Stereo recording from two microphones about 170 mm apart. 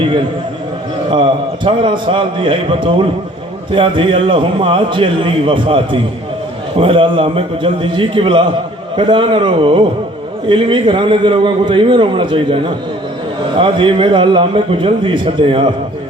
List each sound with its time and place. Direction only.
1.1 s a man's voice: 30° right (ahead or behind)